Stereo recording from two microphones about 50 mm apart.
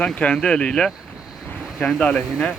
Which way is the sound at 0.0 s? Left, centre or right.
Left.